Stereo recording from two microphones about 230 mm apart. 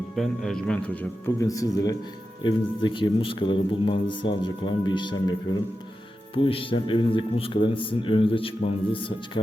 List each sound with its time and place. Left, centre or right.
0.2 s a man's voice: centre
1.4 s speech: centre